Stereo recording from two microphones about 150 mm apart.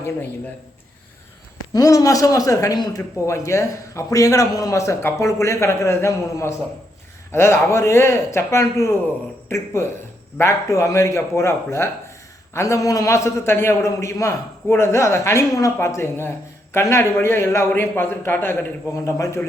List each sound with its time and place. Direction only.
1.7 s a man's voice: 25° left (ahead or behind)